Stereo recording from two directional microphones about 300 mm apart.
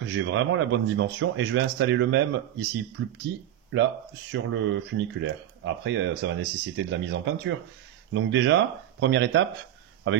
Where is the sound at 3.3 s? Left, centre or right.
Right.